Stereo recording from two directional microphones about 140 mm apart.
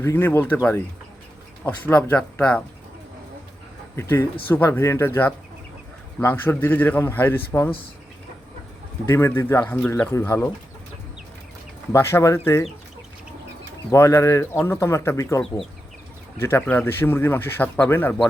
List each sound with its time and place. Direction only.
0.0 s speech: 15° left (ahead or behind)
3.9 s speech: 15° left (ahead or behind)
9.0 s speech: 20° left (ahead or behind)
11.9 s speech: 20° left (ahead or behind)
13.9 s speech: 20° left (ahead or behind)
16.4 s speech: 15° left (ahead or behind)